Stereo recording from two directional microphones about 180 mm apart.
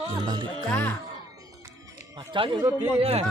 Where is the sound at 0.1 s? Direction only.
25° right (ahead or behind).